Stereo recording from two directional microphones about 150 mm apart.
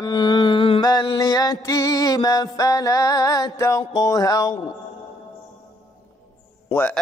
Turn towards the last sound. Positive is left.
turn(degrees=10)  # may be behind; listen again after turning